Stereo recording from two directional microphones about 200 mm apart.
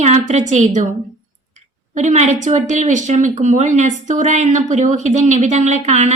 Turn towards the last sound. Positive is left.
turn(degrees=-35)  # may be behind; listen again after turning